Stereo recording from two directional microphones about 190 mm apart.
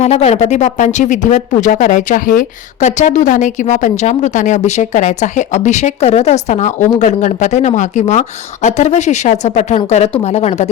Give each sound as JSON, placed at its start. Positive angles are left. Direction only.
{"t": 0.0, "sound": "speech", "side_deg": 35}